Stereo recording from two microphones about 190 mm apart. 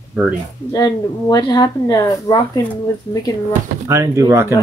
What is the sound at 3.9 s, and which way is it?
Speech, 15° right (ahead or behind).